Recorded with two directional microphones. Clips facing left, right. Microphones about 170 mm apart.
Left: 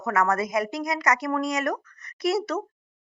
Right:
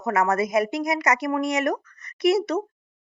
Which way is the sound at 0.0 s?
20° right (ahead or behind).